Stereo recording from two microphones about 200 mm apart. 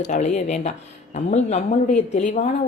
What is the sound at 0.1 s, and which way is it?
A woman's voice, 35° left (ahead or behind).